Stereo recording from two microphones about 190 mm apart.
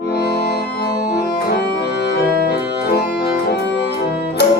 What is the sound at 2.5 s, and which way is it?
Organ, 60° left (ahead or behind).